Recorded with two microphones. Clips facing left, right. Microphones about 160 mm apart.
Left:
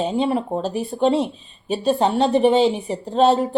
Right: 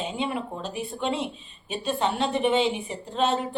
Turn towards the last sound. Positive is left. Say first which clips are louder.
# left 9 dB
turn(degrees=35)  # may be behind; listen again after turning